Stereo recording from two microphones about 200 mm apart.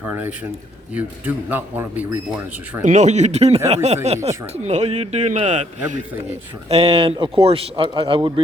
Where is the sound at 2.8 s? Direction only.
35° right (ahead or behind).